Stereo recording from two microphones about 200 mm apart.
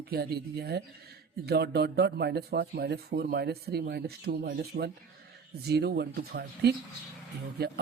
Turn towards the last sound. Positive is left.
turn(degrees=-50)  # may be behind; listen again after turning